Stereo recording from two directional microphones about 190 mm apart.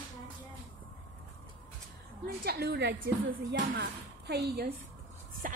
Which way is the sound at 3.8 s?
60° right (ahead or behind).